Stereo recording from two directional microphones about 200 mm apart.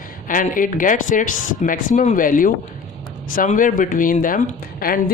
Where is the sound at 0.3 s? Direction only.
40° left (ahead or behind).